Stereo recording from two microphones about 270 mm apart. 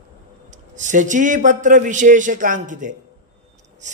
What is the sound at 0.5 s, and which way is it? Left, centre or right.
A man's voice, right.